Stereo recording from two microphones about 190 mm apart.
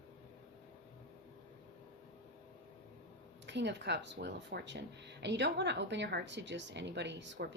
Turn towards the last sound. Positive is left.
turn(degrees=-70)  # may be behind; listen again after turning